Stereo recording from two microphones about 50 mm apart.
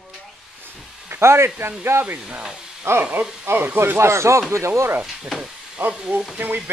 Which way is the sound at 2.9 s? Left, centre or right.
Right.